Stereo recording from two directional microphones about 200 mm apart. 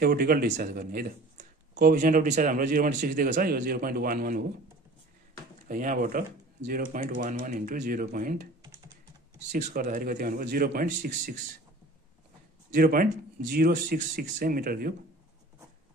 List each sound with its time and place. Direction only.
0.0 s a man's voice: 50° right (ahead or behind)
5.7 s a man's voice: 40° right (ahead or behind)
9.8 s a man's voice: 45° right (ahead or behind)
12.7 s a man's voice: 45° right (ahead or behind)